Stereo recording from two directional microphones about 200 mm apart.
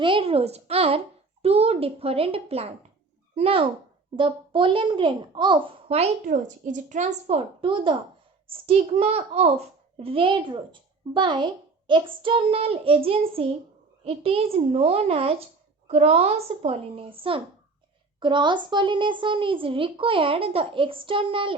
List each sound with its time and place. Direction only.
0.0 s a child's voice: 25° right (ahead or behind)